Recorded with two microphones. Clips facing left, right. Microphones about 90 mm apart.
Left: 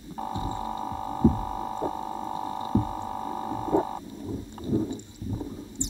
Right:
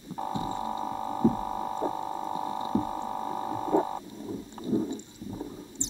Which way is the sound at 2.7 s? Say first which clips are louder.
Left 3 dB; centre (ahead or behind).